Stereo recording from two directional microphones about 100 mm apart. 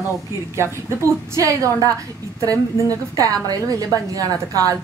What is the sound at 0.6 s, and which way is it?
A woman's voice, 30° right (ahead or behind).